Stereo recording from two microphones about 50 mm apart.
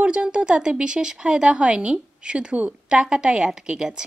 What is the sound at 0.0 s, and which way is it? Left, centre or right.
A woman's voice, right.